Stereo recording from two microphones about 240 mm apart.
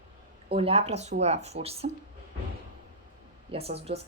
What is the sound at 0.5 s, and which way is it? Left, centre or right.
Speech, right.